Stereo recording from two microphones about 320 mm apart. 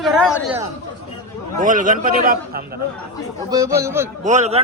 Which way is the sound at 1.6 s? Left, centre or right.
Right.